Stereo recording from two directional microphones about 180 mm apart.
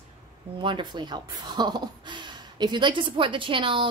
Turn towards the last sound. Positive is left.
turn(degrees=-30)  # may be behind; listen again after turning